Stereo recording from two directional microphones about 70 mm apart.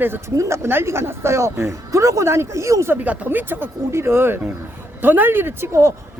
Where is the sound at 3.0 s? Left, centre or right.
Right.